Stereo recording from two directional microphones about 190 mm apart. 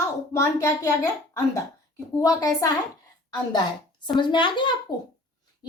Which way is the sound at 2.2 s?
20° left (ahead or behind).